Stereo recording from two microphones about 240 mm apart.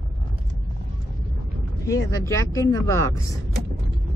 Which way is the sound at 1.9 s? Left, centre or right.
Centre.